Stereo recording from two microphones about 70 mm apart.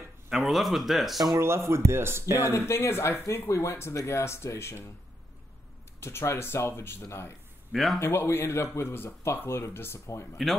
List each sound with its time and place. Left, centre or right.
0.5 s speech: centre
1.1 s speech: right
1.4 s speech: right
2.5 s speech: left
5.9 s speech: left
7.7 s speech: centre
8.0 s speech: left